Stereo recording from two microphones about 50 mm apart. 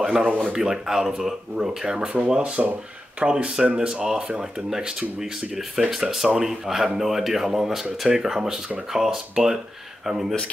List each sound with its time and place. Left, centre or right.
0.0 s speech: centre